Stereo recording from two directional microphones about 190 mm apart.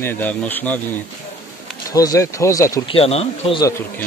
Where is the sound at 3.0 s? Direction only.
30° left (ahead or behind).